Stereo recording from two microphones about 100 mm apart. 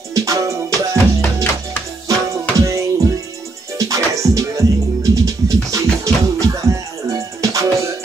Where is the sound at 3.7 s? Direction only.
35° right (ahead or behind).